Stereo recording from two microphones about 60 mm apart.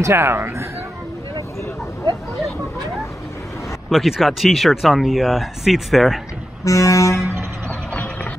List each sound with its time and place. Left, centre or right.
0.0 s speech: right
3.9 s speech: centre
6.6 s vehicle: left
7.9 s a sound: left